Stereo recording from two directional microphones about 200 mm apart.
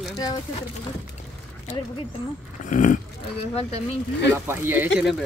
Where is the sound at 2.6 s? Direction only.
40° left (ahead or behind).